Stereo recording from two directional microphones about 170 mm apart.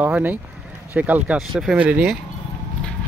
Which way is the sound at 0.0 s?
10° right (ahead or behind).